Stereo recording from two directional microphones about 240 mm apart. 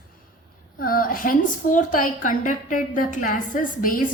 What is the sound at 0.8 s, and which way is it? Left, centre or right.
A woman's voice, left.